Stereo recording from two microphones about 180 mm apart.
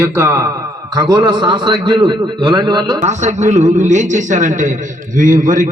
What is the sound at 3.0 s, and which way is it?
A man's voice, 40° right (ahead or behind).